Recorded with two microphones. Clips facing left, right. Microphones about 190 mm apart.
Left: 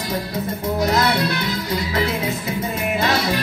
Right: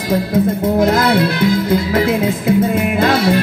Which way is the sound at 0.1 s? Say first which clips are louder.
Right 12 dB; 50° right (ahead or behind).